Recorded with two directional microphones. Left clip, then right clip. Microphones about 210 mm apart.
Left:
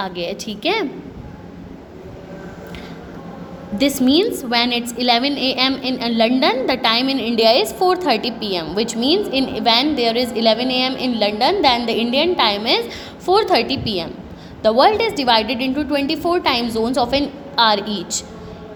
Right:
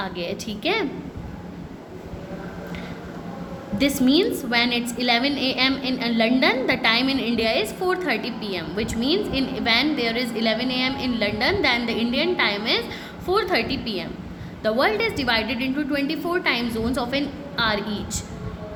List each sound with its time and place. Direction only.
0.0 s a woman's voice: 25° left (ahead or behind)
3.8 s a woman's voice: 25° left (ahead or behind)